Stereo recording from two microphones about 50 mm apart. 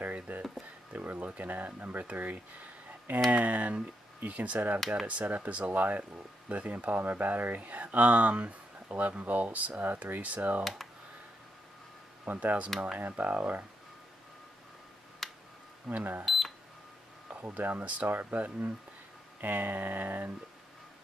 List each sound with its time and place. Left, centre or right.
0.0 s speech: right
4.7 s speech: centre
5.0 s speech: right
10.6 s speech: centre
12.3 s speech: right
15.2 s a sound: centre
15.9 s speech: right
16.3 s cash register: centre
17.3 s speech: right